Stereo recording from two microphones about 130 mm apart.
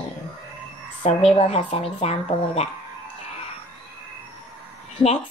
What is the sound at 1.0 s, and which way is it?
Speech, 50° left (ahead or behind).